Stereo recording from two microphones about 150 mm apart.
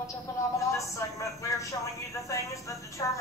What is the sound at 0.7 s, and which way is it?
A woman's voice, 20° left (ahead or behind).